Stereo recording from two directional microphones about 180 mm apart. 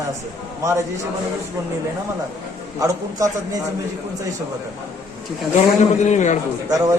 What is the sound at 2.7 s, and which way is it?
Speech, 20° right (ahead or behind).